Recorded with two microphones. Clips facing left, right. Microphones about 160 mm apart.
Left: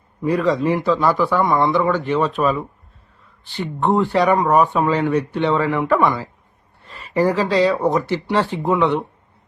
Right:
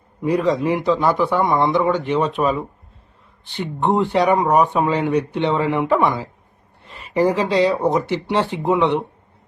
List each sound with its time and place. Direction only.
0.2 s speech: 20° right (ahead or behind)